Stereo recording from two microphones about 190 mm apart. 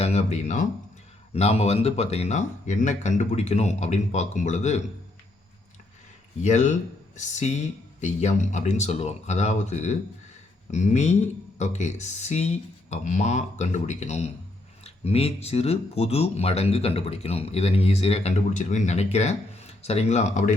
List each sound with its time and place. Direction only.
0.0 s a sound: 35° left (ahead or behind)
1.3 s speech: 35° left (ahead or behind)
6.4 s speech: 40° left (ahead or behind)